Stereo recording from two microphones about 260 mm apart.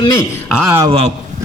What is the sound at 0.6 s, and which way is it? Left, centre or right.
Speech, centre.